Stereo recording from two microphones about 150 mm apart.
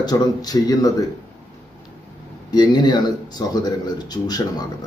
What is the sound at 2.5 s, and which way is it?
A man's voice, 30° left (ahead or behind).